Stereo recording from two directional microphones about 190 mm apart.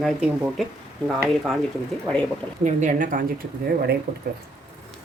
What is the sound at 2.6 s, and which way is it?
Speech, 40° right (ahead or behind).